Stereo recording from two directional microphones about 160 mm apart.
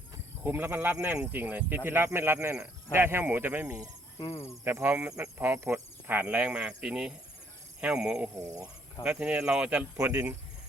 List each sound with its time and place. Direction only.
0.4 s speech: 10° right (ahead or behind)
4.2 s insect: 15° left (ahead or behind)
4.6 s speech: 15° right (ahead or behind)